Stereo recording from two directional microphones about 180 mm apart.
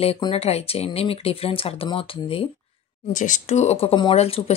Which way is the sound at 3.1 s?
45° left (ahead or behind).